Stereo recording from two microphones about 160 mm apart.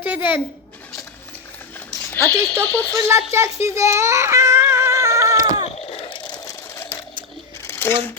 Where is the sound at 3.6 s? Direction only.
20° right (ahead or behind).